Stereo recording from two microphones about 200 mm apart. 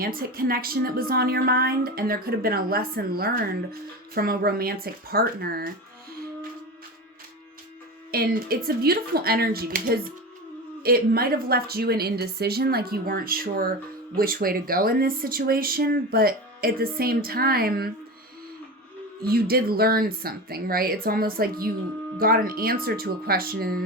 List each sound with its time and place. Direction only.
0.0 s a woman's voice: 45° right (ahead or behind)
8.1 s a woman's voice: 50° right (ahead or behind)
19.2 s a woman's voice: 50° right (ahead or behind)